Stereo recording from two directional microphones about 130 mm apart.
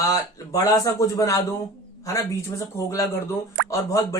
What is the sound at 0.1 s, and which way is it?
Speech, 30° left (ahead or behind).